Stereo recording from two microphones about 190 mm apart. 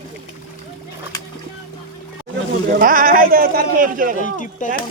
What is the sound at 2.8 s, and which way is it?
A man's voice, 45° right (ahead or behind).